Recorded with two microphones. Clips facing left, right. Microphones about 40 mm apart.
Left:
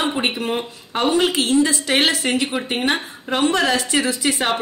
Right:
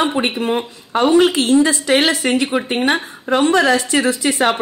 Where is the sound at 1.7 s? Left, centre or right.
Right.